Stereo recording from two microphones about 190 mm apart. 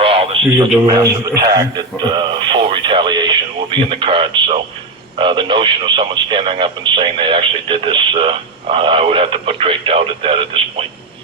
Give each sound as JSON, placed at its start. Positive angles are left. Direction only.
{"t": 0.0, "sound": "radio", "side_deg": -30}
{"t": 1.2, "sound": "speech", "side_deg": -20}